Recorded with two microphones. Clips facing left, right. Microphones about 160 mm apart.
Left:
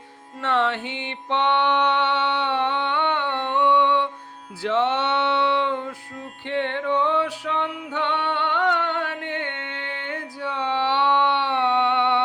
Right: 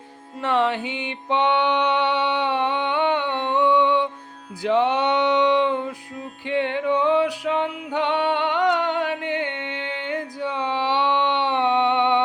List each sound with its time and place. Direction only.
0.4 s music: 15° right (ahead or behind)